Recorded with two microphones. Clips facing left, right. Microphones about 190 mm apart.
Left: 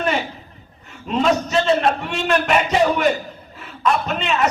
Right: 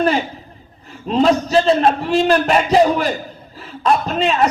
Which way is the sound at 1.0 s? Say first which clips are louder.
Right 4 dB; 35° right (ahead or behind).